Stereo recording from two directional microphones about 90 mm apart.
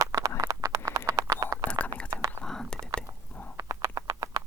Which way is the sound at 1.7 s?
10° left (ahead or behind).